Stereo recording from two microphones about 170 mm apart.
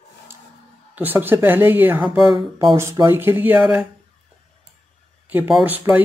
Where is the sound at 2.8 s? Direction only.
15° right (ahead or behind).